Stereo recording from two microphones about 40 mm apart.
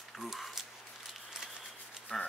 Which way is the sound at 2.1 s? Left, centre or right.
Left.